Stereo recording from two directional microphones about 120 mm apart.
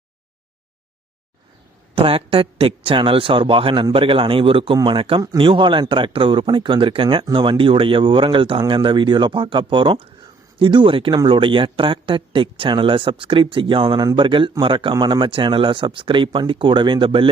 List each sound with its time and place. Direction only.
2.0 s a man's voice: 50° right (ahead or behind)